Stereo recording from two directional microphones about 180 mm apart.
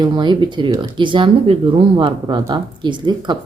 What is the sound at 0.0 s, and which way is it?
Speech, 25° right (ahead or behind).